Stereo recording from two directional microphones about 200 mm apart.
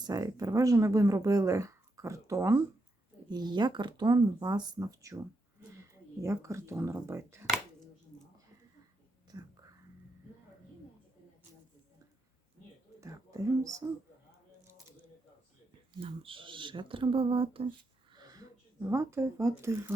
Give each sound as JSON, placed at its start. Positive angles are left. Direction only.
{"t": 0.0, "sound": "speech", "side_deg": -20}
{"t": 13.0, "sound": "whispering", "side_deg": -15}
{"t": 16.0, "sound": "speech", "side_deg": -25}
{"t": 18.1, "sound": "shuffling cards", "side_deg": -20}